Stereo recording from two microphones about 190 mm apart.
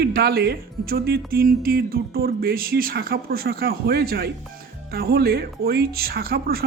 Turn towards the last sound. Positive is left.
turn(degrees=-50)  # may be behind; listen again after turning